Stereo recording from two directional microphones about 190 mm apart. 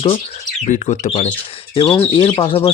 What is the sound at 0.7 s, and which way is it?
Speech, 40° left (ahead or behind).